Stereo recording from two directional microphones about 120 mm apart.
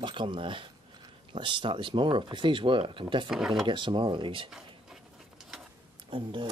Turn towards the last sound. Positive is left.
turn(degrees=-45)  # may be behind; listen again after turning